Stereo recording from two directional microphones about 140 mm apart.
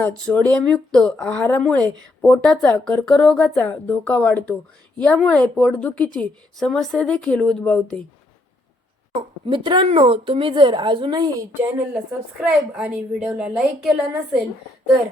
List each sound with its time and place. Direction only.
0.3 s a woman's voice: 10° left (ahead or behind)
9.5 s a woman's voice: 35° right (ahead or behind)
11.9 s a woman's voice: 5° right (ahead or behind)